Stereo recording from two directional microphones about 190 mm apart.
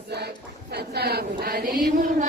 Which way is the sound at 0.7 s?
60° right (ahead or behind).